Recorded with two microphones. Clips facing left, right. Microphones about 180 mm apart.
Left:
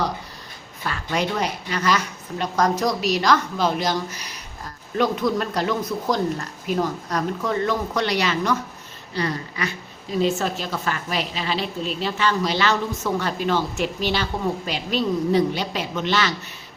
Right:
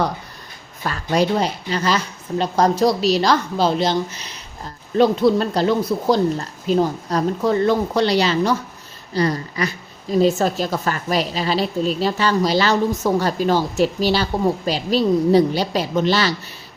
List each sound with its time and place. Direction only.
0.9 s a woman's voice: 35° right (ahead or behind)